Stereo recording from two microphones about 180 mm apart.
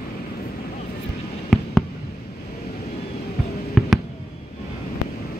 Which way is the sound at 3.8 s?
5° left (ahead or behind).